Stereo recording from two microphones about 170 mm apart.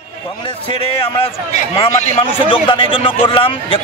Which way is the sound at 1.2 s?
35° left (ahead or behind).